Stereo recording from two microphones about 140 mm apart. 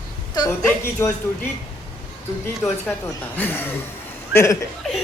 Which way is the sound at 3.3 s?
15° left (ahead or behind).